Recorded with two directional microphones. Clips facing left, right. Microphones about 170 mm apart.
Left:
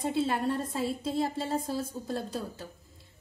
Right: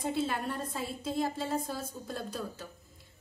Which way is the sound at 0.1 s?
30° left (ahead or behind).